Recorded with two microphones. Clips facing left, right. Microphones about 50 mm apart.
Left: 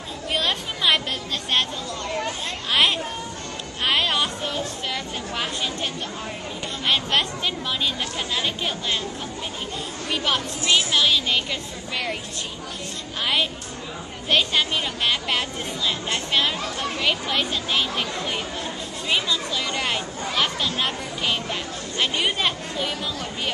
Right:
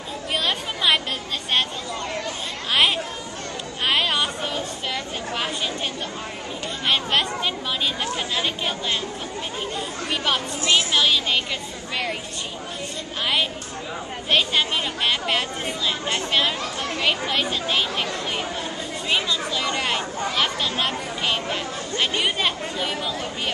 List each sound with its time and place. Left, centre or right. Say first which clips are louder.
0.3 s a sound: even; centre
1.5 s chatter: right 1 dB; centre
2.7 s a sound: even; centre
6.9 s speech: even; centre
10.0 s speech: even; centre
10.6 s speech: right 1 dB; centre
10.9 s speech: even; centre
14.3 s speech: even; centre
19.0 s a sound: even; centre